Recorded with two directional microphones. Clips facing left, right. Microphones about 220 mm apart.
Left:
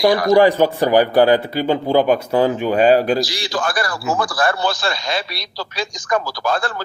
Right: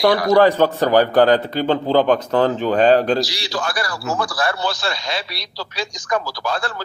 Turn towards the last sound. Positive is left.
turn(degrees=50)  # may be behind; listen again after turning